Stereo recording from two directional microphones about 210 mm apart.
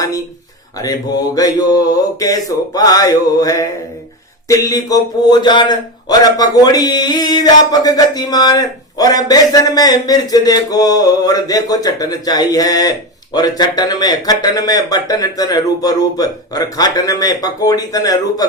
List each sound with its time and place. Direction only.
0.8 s a man's voice: 15° left (ahead or behind)